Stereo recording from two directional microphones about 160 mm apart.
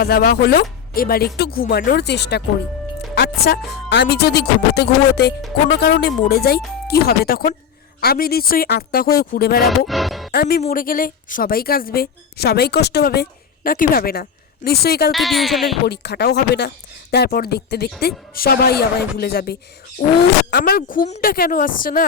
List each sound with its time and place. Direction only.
0.0 s a woman's voice: 75° left (ahead or behind)
3.2 s a woman's voice: 80° left
9.6 s speech: centre (ahead or behind)
10.3 s a woman's voice: 75° left (ahead or behind)
10.7 s a woman's voice: 60° left (ahead or behind); by 13.2 s 85° left
13.7 s speech: 65° left (ahead or behind)
15.1 s speech: centre (ahead or behind)
15.9 s speech: 90° left
18.0 s a woman's voice: 75° left (ahead or behind)